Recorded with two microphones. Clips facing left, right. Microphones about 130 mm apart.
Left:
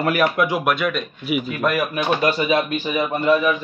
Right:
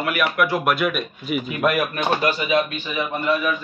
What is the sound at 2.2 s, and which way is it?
A man's voice, 30° left (ahead or behind).